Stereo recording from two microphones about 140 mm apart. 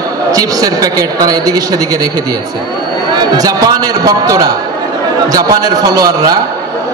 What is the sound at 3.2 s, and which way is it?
A man's voice, 25° right (ahead or behind).